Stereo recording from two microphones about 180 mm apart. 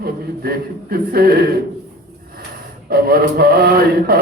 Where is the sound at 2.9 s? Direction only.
55° right (ahead or behind).